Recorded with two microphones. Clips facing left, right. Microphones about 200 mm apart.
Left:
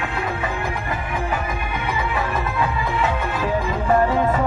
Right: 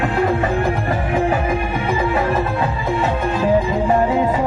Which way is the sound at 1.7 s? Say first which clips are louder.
Right 3 dB; 30° right (ahead or behind).